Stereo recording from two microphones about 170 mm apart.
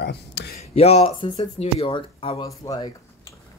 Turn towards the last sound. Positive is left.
turn(degrees=25)  # may be behind; listen again after turning